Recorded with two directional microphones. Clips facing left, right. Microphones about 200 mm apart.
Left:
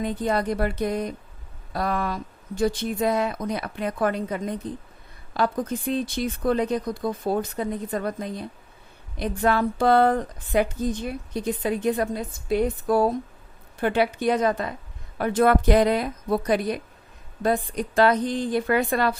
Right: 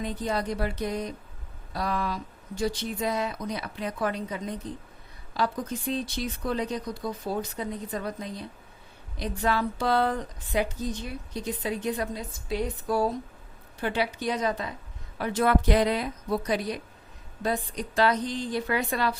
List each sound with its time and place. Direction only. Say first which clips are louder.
0.0 s a woman's voice: left 5 dB; 55° left (ahead or behind)